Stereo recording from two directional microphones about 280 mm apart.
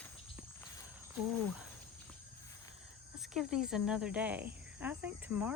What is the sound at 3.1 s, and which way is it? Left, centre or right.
Speech, centre.